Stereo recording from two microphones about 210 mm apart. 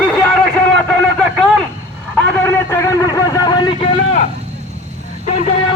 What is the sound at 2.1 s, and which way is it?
Vehicle, 10° left (ahead or behind).